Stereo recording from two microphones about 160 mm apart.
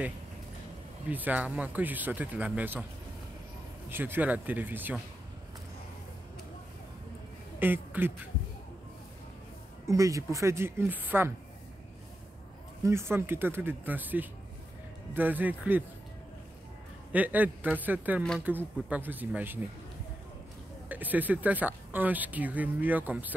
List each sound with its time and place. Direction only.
1.1 s speech: 10° right (ahead or behind)
3.9 s speech: 10° right (ahead or behind)
7.5 s speech: 10° right (ahead or behind)
9.8 s speech: 20° right (ahead or behind)
12.8 s speech: 15° right (ahead or behind)
17.1 s speech: 10° right (ahead or behind)
20.9 s speech: 10° right (ahead or behind)